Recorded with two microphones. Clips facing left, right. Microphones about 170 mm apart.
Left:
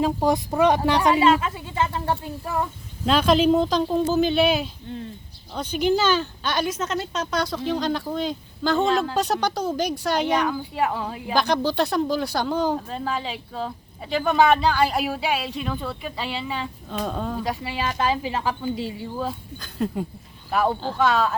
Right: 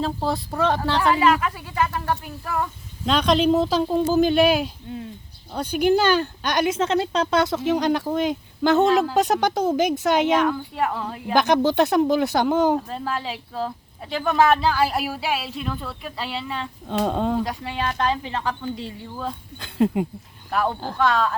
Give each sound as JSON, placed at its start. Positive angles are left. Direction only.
{"t": 0.0, "sound": "speech", "side_deg": 15}
{"t": 3.1, "sound": "speech", "side_deg": 5}
{"t": 6.7, "sound": "speech", "side_deg": -30}
{"t": 8.8, "sound": "speech", "side_deg": 0}
{"t": 9.3, "sound": "speech", "side_deg": -20}
{"t": 10.3, "sound": "speech", "side_deg": 0}
{"t": 11.3, "sound": "speech", "side_deg": -20}
{"t": 12.7, "sound": "speech", "side_deg": 0}
{"t": 17.0, "sound": "speech", "side_deg": -25}
{"t": 17.4, "sound": "speech", "side_deg": 5}
{"t": 20.5, "sound": "speech", "side_deg": 5}